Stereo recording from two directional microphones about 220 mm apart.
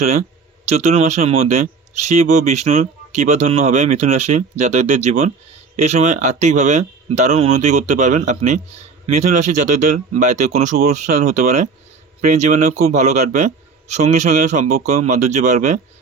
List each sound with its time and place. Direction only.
0.8 s speech: 30° right (ahead or behind)